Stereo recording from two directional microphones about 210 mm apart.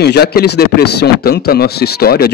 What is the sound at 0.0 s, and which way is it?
A man's voice, 50° left (ahead or behind).